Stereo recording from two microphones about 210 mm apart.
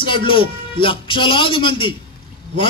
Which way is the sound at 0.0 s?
25° left (ahead or behind).